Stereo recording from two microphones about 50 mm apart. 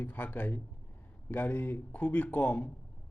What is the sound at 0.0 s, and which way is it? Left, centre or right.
A man's voice, left.